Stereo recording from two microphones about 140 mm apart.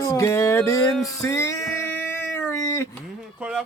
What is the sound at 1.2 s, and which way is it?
Music, 20° left (ahead or behind).